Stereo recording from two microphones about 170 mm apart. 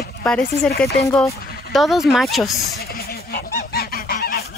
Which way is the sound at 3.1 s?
65° left (ahead or behind).